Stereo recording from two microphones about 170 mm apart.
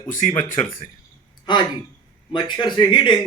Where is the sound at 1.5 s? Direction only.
25° left (ahead or behind).